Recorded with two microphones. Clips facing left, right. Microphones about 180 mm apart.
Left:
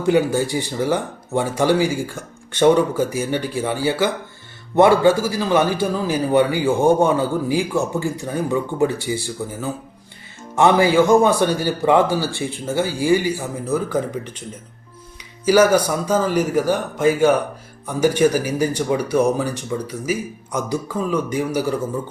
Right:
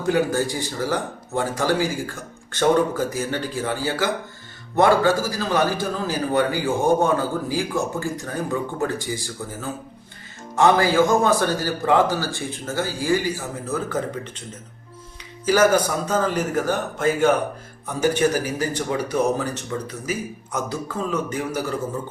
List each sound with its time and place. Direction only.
0.0 s a man's voice: 20° left (ahead or behind)
10.6 s speech: 15° left (ahead or behind)
15.4 s speech: 10° left (ahead or behind)